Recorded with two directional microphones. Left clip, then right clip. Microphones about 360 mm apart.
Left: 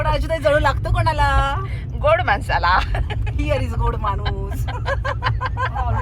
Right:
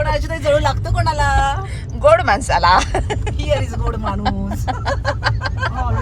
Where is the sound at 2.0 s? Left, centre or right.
Centre.